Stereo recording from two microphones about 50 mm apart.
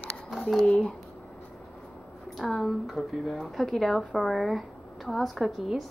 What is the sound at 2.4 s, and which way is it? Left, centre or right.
Speech, centre.